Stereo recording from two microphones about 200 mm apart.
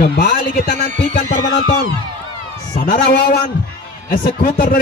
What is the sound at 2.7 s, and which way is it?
Speech, 45° left (ahead or behind).